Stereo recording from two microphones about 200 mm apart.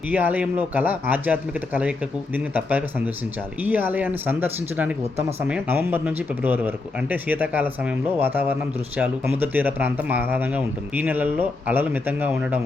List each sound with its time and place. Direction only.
0.1 s speech: 10° right (ahead or behind)